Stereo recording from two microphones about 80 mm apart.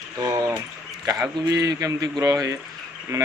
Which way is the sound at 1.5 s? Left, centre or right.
Right.